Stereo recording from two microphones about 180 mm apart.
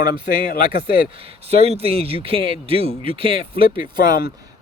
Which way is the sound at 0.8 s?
30° right (ahead or behind).